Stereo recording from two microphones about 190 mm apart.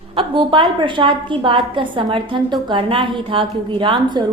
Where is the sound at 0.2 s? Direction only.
25° right (ahead or behind).